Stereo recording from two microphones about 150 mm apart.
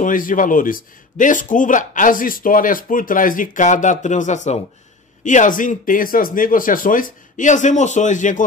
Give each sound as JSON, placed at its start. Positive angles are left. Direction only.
{"t": 0.0, "sound": "speech", "side_deg": 65}